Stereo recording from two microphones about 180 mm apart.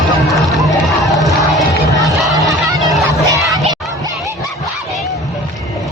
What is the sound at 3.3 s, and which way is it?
Crowd, 20° right (ahead or behind).